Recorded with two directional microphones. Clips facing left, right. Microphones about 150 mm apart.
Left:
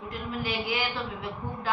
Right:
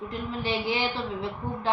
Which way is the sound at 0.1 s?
30° right (ahead or behind).